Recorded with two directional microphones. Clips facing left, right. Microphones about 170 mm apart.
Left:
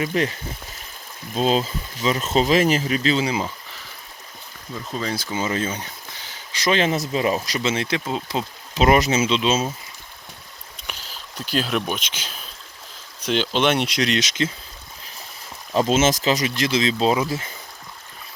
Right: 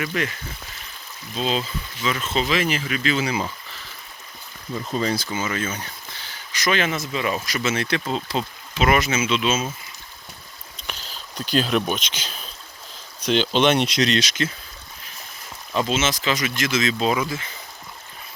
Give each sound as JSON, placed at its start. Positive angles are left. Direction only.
{"t": 0.0, "sound": "speech", "side_deg": 30}
{"t": 1.3, "sound": "speech", "side_deg": 45}
{"t": 4.9, "sound": "speech", "side_deg": 0}
{"t": 5.3, "sound": "speech", "side_deg": 30}
{"t": 5.8, "sound": "a sound", "side_deg": 15}
{"t": 6.5, "sound": "speech", "side_deg": 30}
{"t": 8.7, "sound": "speech", "side_deg": 35}
{"t": 10.8, "sound": "speech", "side_deg": 10}
{"t": 15.7, "sound": "speech", "side_deg": 40}